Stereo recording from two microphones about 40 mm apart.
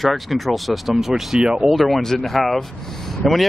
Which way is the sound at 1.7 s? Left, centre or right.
Centre.